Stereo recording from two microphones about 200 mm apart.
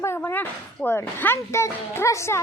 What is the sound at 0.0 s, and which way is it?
A woman's voice, 10° left (ahead or behind).